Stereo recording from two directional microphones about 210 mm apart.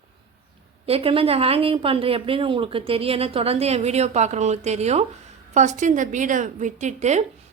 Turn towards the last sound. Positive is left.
turn(degrees=-35)  # may be behind; listen again after turning